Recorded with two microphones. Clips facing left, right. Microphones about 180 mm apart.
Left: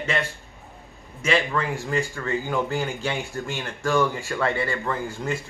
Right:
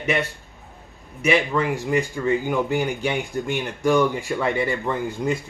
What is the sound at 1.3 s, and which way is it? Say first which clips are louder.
Speech: right 3 dB; 15° right (ahead or behind).